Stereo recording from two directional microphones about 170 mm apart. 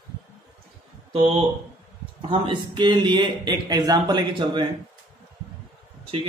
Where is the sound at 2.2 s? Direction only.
30° right (ahead or behind).